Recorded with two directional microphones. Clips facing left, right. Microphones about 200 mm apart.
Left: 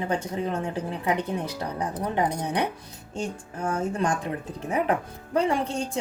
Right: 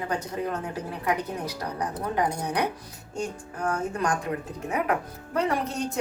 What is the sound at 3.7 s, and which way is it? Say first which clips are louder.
A woman's voice: left 2 dB; 30° left (ahead or behind).